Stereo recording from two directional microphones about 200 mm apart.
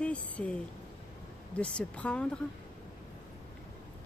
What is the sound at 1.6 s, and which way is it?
Speech, 5° left (ahead or behind).